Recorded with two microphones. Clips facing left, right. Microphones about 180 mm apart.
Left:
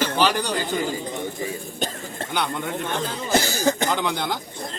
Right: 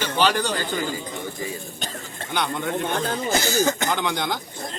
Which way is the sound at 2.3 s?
5° left (ahead or behind).